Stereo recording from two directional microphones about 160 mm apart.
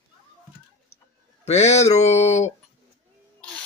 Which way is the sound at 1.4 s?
45° left (ahead or behind).